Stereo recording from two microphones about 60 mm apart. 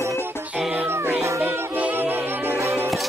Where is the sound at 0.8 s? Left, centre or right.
Right.